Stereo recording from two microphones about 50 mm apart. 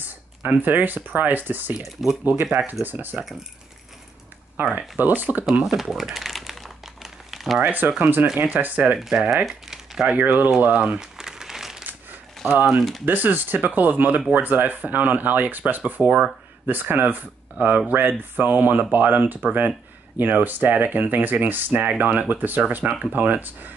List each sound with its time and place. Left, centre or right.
0.0 s speech: right
1.8 s speech: centre
2.8 s speech: right
4.7 s speech: right
5.5 s crumpling: centre
7.6 s speech: right
9.1 s speech: right
9.5 s crumpling: centre
10.0 s speech: right
11.0 s crumpling: centre
12.4 s speech: right
16.6 s speech: right